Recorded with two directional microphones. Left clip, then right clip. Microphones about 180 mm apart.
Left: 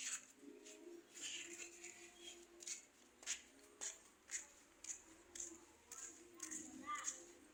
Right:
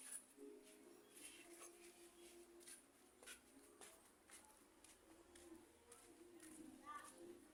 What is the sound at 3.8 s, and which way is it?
Music, 60° left (ahead or behind).